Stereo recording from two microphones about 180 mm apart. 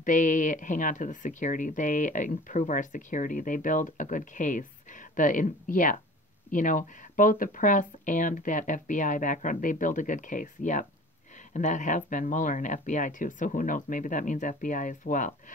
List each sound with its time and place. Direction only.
0.0 s speech: 45° left (ahead or behind)